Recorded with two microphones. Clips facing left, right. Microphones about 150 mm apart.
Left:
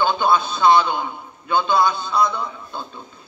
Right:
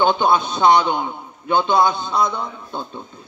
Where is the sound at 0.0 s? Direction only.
20° right (ahead or behind).